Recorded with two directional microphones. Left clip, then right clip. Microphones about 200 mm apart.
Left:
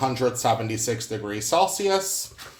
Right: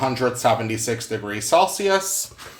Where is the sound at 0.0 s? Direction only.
Centre (ahead or behind).